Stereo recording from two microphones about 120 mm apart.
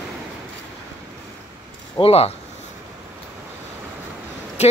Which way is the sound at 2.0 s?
55° left (ahead or behind).